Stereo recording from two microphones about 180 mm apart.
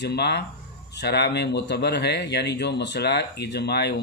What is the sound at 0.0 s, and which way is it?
Speech, 65° left (ahead or behind).